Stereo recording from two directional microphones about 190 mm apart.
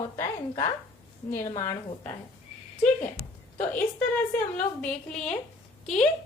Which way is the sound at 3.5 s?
10° left (ahead or behind).